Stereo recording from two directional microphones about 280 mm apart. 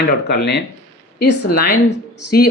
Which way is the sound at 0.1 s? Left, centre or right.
Left.